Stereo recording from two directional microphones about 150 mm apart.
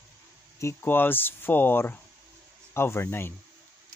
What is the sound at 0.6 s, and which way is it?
A man's voice, 15° left (ahead or behind).